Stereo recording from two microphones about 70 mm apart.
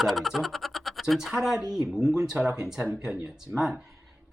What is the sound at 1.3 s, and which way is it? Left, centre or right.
Speech, centre.